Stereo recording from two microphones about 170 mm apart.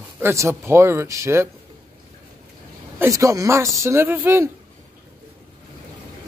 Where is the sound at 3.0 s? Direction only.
20° right (ahead or behind).